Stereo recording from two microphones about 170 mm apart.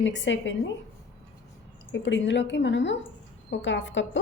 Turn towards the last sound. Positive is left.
turn(degrees=90)